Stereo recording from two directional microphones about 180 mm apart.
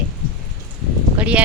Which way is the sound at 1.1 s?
5° right (ahead or behind).